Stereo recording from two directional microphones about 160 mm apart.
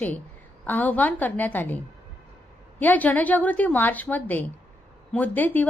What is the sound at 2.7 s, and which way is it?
A woman's voice, 10° left (ahead or behind).